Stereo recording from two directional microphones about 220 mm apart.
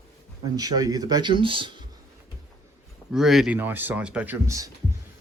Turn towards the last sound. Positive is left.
turn(degrees=-15)  # may be behind; listen again after turning